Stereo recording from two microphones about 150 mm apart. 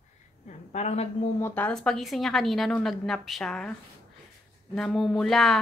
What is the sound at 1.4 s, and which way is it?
A woman's voice, 10° left (ahead or behind).